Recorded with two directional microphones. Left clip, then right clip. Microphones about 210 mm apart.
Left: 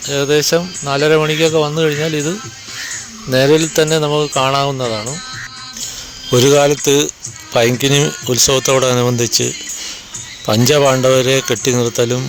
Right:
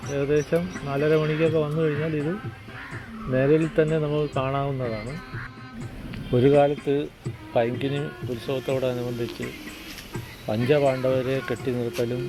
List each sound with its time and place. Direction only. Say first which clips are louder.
0.1 s speech: left 10 dB; 35° left (ahead or behind)
3.3 s speech: left 9 dB; 40° left (ahead or behind)
6.3 s speech: left 8 dB; 45° left (ahead or behind)
10.4 s speech: left 10 dB; 50° left (ahead or behind)